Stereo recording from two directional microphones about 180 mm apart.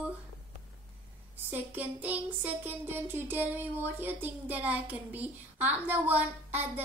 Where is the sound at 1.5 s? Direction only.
10° right (ahead or behind).